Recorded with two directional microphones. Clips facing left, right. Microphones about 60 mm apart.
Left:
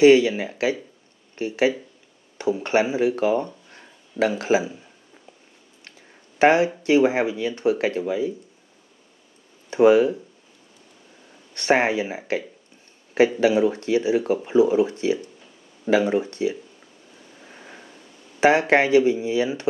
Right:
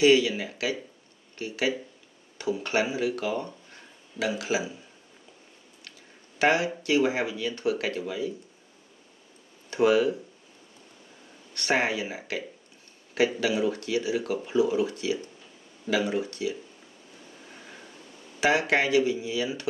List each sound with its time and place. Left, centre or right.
0.0 s speech: left
5.9 s a sound: left
6.8 s speech: left
9.7 s speech: left
11.5 s speech: left
18.4 s speech: left